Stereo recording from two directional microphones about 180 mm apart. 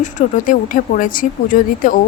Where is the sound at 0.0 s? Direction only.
45° left (ahead or behind).